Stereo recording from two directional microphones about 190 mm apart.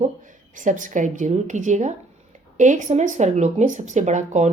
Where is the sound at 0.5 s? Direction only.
40° right (ahead or behind).